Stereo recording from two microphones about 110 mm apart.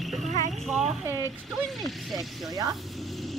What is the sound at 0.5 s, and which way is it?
Speech, centre (ahead or behind).